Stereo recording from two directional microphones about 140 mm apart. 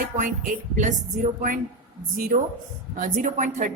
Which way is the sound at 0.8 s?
60° right (ahead or behind).